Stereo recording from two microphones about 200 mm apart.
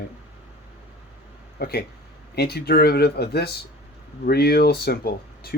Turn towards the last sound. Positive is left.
turn(degrees=50)  # may be behind; listen again after turning